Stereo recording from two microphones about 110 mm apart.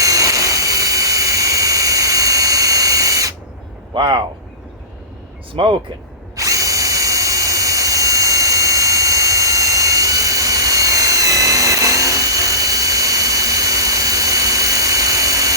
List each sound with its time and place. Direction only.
0.0 s a sound: 30° right (ahead or behind)
3.9 s speech: 45° right (ahead or behind)
5.6 s speech: 50° right (ahead or behind)
6.3 s drill: 30° right (ahead or behind)